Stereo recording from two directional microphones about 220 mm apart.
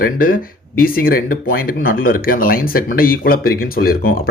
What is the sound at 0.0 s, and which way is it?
Speech, 40° left (ahead or behind).